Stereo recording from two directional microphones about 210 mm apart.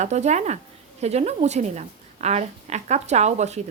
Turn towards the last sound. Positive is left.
turn(degrees=-30)  # may be behind; listen again after turning